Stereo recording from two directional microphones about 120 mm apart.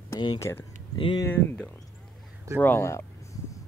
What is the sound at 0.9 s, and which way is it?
Speech, 45° left (ahead or behind).